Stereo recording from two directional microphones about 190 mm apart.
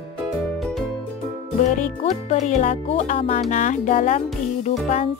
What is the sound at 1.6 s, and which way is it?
Speech, 40° left (ahead or behind).